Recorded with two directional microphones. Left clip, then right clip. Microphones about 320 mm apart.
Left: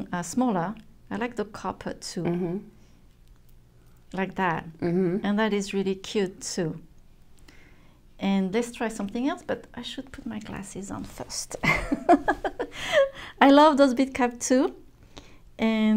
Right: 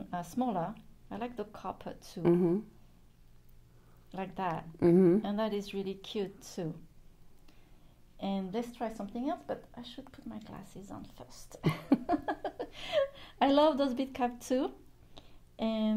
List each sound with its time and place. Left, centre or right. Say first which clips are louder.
0.0 s a woman's voice: left 7 dB; left
2.2 s a woman's voice: right 2 dB; right
4.1 s a woman's voice: left 9 dB; centre
4.7 s a woman's voice: right 1 dB; right
5.2 s a woman's voice: left 8 dB; left
8.2 s a woman's voice: left 10 dB; left
12.1 s a woman's voice: left 12 dB; left
15.1 s a sound: left 8 dB; centre